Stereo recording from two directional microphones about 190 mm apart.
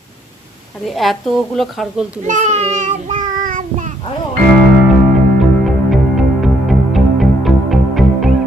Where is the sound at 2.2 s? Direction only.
40° right (ahead or behind).